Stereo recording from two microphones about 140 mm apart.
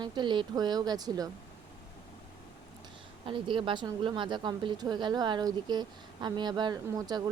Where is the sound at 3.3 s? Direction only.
35° right (ahead or behind).